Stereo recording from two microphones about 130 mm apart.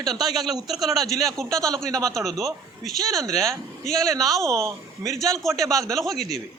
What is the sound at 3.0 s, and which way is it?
Speech, 25° right (ahead or behind).